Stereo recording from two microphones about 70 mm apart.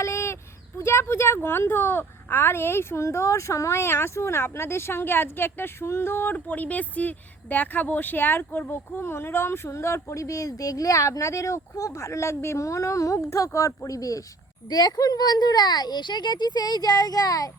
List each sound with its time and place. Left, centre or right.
0.0 s a sound: left
0.8 s speech: left
14.7 s speech: left